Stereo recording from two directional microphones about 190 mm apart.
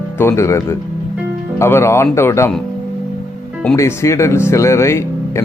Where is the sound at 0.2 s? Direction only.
15° left (ahead or behind).